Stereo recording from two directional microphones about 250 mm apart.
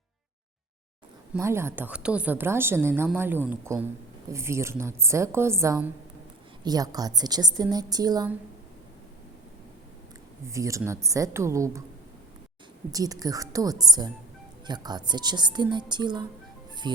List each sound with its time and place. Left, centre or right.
1.3 s a woman's voice: centre
10.4 s a woman's voice: centre
12.9 s a woman's voice: centre